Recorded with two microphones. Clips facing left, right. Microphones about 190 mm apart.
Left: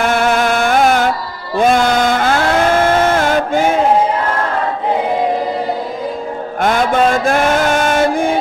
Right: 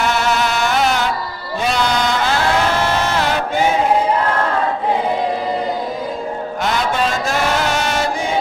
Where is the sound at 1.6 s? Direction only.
50° left (ahead or behind).